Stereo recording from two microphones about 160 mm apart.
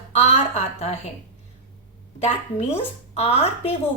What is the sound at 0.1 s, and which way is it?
Speech, 40° left (ahead or behind).